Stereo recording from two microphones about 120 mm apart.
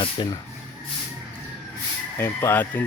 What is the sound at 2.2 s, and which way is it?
Speech, 20° left (ahead or behind).